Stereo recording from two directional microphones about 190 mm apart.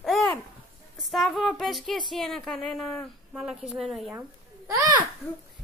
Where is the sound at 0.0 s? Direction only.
Centre (ahead or behind).